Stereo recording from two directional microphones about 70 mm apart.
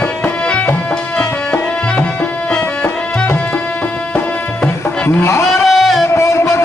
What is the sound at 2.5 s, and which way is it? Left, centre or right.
Music, centre.